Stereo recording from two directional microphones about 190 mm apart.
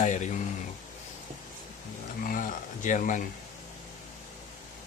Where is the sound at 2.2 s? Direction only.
45° left (ahead or behind).